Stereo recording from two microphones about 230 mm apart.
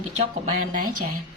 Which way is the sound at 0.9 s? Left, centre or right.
Right.